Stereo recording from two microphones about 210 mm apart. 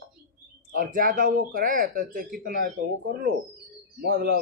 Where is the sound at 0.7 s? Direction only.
40° right (ahead or behind).